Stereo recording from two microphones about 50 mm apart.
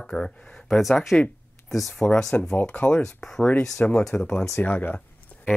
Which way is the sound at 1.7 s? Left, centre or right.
Centre.